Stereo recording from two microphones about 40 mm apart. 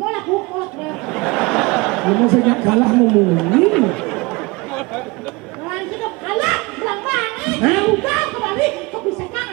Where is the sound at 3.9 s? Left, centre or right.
Centre.